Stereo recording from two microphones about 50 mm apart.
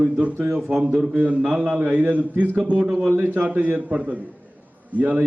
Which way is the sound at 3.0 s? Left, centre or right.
Right.